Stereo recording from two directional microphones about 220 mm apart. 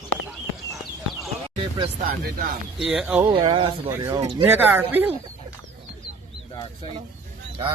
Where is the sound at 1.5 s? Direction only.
25° right (ahead or behind).